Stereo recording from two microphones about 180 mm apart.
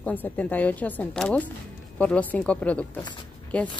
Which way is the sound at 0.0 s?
10° left (ahead or behind).